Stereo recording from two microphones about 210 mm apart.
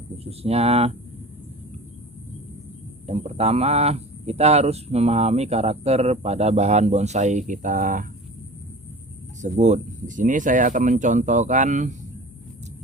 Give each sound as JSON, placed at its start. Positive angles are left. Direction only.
{"t": 0.3, "sound": "speech", "side_deg": -30}
{"t": 3.1, "sound": "speech", "side_deg": -30}
{"t": 9.4, "sound": "speech", "side_deg": -35}